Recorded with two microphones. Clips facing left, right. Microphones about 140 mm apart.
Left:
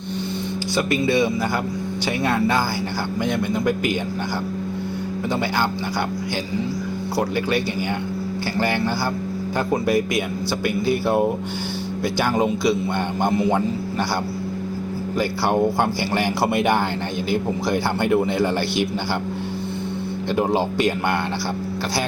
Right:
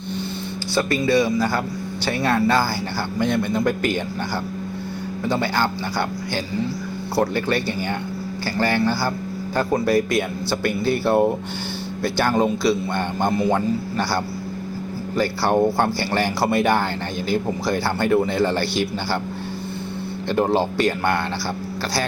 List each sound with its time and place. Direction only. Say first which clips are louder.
0.8 s a man's voice: right 1 dB; 20° left (ahead or behind)
7.2 s a man's voice: right 1 dB; 15° left (ahead or behind)
15.8 s a man's voice: even; 15° left (ahead or behind)
20.3 s speech: right 1 dB; 10° left (ahead or behind)